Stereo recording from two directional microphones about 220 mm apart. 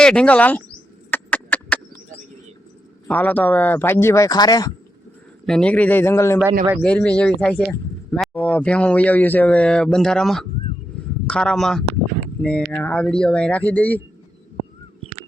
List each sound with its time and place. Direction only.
0.0 s speech: 5° left (ahead or behind)
1.1 s a sound: 10° left (ahead or behind)
3.1 s speech: 10° left (ahead or behind)
5.5 s speech: 5° left (ahead or behind)